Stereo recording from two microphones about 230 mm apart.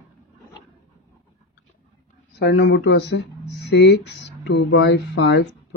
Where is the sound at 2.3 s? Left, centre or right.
Left.